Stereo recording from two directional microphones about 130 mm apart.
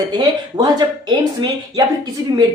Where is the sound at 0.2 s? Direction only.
35° right (ahead or behind).